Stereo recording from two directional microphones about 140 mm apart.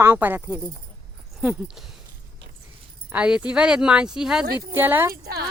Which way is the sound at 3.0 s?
10° right (ahead or behind).